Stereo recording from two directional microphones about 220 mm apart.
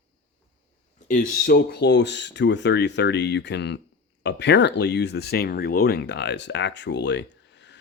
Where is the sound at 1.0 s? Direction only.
35° left (ahead or behind).